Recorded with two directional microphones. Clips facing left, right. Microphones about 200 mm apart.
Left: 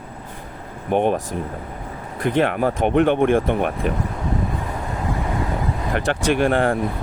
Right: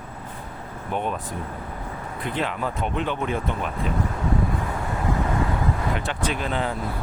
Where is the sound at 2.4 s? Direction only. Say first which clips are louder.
Left 8 dB; 65° left (ahead or behind).